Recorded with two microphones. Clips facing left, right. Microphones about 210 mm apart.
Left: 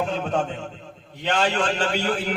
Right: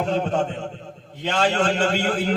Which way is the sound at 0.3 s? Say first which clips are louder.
Right 2 dB; 40° right (ahead or behind).